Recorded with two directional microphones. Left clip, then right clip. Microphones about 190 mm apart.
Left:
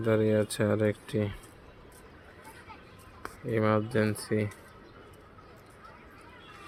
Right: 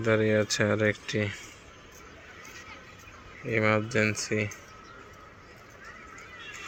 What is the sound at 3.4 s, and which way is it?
Speech, 15° left (ahead or behind).